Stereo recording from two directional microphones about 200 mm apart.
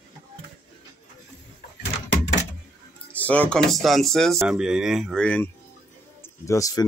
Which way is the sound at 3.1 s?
5° left (ahead or behind).